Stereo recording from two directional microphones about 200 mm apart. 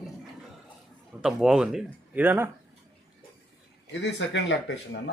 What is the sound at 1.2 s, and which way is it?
Speech, 5° right (ahead or behind).